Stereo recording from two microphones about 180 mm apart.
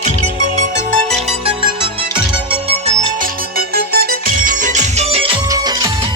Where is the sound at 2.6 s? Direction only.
40° right (ahead or behind).